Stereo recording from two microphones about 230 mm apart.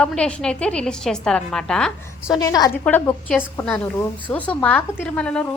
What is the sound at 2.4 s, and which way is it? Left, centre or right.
A woman's voice, centre.